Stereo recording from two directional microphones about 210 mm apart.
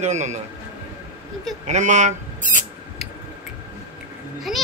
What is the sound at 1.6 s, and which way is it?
Speech, 35° right (ahead or behind).